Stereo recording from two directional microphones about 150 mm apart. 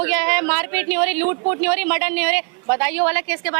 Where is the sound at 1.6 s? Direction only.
10° right (ahead or behind).